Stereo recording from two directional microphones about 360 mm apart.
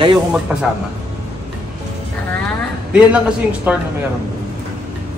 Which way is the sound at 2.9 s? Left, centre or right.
Centre.